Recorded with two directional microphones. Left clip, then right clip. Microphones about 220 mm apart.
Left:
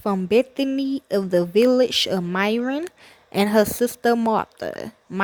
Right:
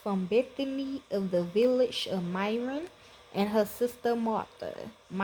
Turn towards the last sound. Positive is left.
turn(degrees=40)  # may be behind; listen again after turning